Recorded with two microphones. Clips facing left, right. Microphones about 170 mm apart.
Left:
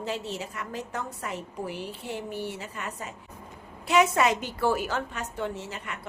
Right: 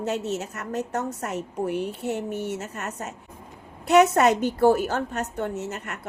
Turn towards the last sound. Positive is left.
turn(degrees=-45)  # may be behind; listen again after turning